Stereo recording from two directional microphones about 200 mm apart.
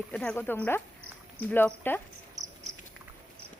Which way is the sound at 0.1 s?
5° left (ahead or behind).